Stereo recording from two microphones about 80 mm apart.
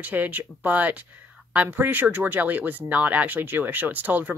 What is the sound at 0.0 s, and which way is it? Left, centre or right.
Speech, right.